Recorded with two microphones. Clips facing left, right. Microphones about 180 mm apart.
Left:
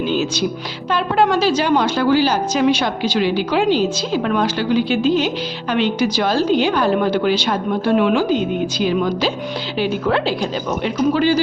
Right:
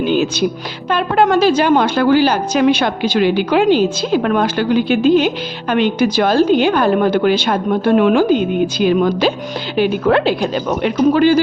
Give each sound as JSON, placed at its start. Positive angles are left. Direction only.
{"t": 0.0, "sound": "a woman's voice", "side_deg": -55}